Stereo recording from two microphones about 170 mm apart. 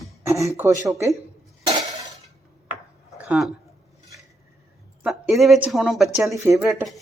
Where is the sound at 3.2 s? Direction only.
10° right (ahead or behind).